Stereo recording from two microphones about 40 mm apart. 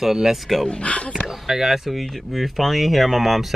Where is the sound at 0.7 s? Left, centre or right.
Left.